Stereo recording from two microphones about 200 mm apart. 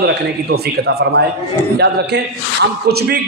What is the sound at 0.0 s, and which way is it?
A man's voice, 55° right (ahead or behind).